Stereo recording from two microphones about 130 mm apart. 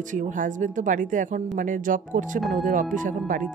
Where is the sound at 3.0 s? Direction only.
85° right.